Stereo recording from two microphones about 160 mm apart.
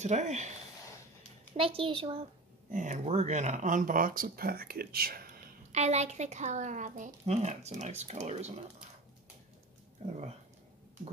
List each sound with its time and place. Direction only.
0.0 s speech: 45° right (ahead or behind)
1.5 s a child's voice: 35° right (ahead or behind)
2.7 s speech: 50° right (ahead or behind); by 5.4 s 65° right (ahead or behind)
5.7 s speech: 45° right (ahead or behind)